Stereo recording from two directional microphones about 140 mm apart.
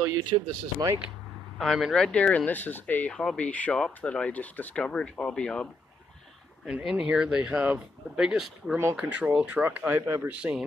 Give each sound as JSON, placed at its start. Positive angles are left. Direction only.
{"t": 0.0, "sound": "speech", "side_deg": -25}
{"t": 1.6, "sound": "speech", "side_deg": 0}